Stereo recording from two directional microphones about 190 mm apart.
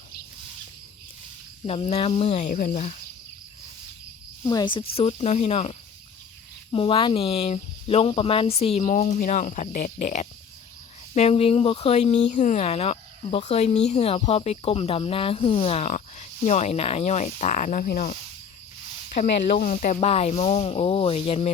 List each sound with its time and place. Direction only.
1.6 s speech: 30° left (ahead or behind)
4.4 s speech: 20° left (ahead or behind); by 18.2 s 45° left (ahead or behind)
19.0 s a sound: 40° left (ahead or behind)
19.5 s speech: 45° left (ahead or behind)